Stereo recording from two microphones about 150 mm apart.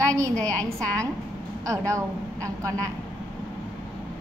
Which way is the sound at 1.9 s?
20° right (ahead or behind).